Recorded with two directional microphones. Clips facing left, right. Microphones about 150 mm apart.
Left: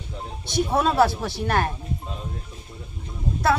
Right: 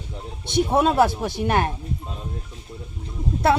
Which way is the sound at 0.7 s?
20° right (ahead or behind).